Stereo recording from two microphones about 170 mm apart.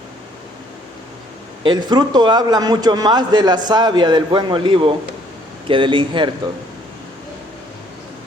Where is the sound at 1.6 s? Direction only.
25° right (ahead or behind).